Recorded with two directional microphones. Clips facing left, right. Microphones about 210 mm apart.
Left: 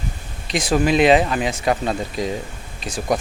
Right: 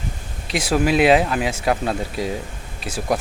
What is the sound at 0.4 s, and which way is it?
Speech, 10° right (ahead or behind).